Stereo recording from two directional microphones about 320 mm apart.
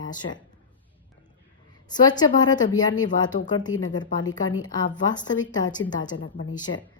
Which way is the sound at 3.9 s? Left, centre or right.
Centre.